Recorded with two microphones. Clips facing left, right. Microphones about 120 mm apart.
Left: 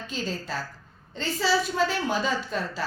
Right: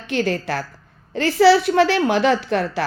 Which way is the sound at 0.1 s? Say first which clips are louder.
Right 11 dB; 75° right (ahead or behind).